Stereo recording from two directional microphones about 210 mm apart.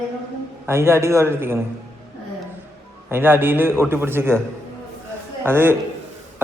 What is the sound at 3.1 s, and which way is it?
A man's voice, 10° right (ahead or behind).